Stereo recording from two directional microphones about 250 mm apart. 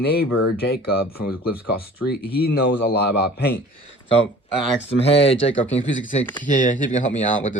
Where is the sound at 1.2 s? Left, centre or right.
Left.